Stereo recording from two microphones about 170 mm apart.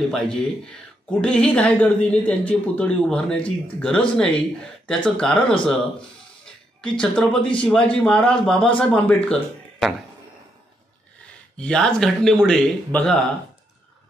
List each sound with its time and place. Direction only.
0.1 s speech: 5° left (ahead or behind)
11.5 s speech: 5° left (ahead or behind)